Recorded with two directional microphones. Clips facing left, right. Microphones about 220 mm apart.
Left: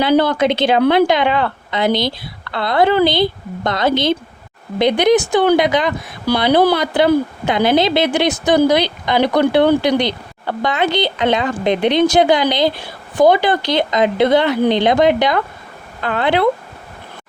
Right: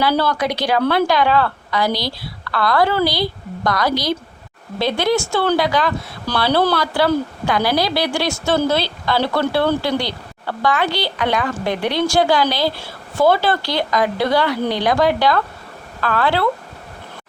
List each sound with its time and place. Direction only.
0.0 s speech: 20° left (ahead or behind)